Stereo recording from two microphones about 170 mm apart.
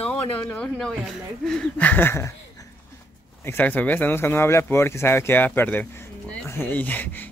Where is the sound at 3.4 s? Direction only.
10° left (ahead or behind).